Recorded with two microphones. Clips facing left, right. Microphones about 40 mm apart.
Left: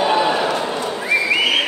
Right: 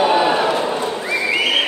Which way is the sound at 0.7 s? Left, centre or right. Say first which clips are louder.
Right 2 dB; centre.